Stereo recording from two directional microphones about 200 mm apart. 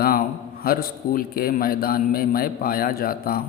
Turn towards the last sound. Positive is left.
turn(degrees=45)  # may be behind; listen again after turning